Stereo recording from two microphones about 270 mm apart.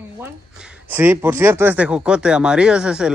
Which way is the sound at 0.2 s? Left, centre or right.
Centre.